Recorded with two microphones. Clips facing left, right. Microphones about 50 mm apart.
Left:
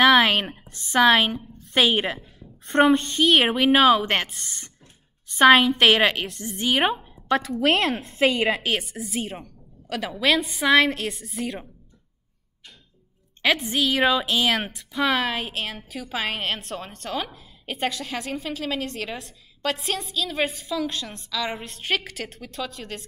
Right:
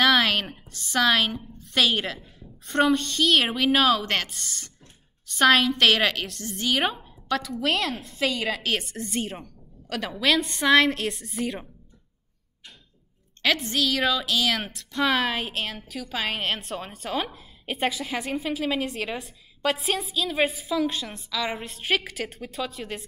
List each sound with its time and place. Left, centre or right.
0.0 s a sound: centre
0.7 s a woman's voice: left
8.5 s a woman's voice: centre
13.4 s a woman's voice: centre
14.6 s a woman's voice: centre